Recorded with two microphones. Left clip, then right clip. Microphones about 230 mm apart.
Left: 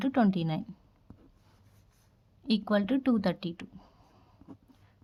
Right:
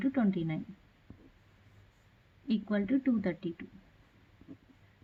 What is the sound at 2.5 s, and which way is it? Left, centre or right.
A woman's voice, left.